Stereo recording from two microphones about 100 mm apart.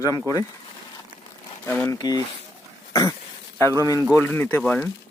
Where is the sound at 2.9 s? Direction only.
35° left (ahead or behind).